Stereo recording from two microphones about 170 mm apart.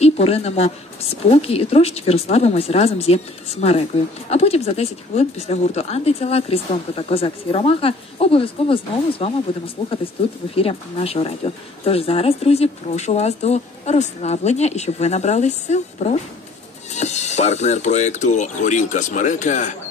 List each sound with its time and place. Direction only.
0.0 s speech: 35° left (ahead or behind)